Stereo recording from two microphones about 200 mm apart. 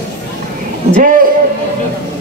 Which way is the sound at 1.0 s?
45° right (ahead or behind).